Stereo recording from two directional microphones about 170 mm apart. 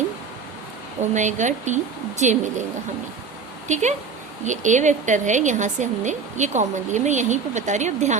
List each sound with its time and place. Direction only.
1.1 s speech: 45° right (ahead or behind)
3.7 s speech: 45° right (ahead or behind)